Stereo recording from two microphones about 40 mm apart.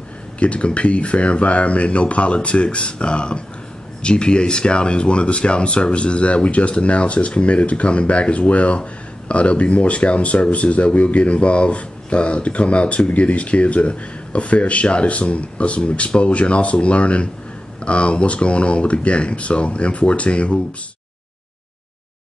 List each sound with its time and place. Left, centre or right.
0.4 s speech: left